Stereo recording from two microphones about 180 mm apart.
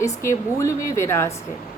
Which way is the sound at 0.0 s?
15° left (ahead or behind).